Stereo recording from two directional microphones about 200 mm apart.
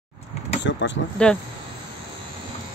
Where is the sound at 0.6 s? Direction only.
60° left (ahead or behind).